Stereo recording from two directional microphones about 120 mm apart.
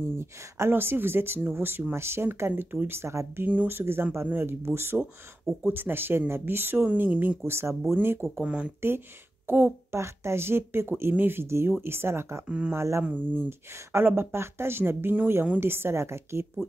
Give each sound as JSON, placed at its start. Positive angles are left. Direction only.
{"t": 0.2, "sound": "speech", "side_deg": -20}
{"t": 12.4, "sound": "speech", "side_deg": -10}